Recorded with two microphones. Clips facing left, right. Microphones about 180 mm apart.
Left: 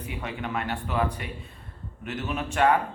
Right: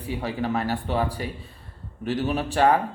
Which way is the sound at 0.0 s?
30° right (ahead or behind).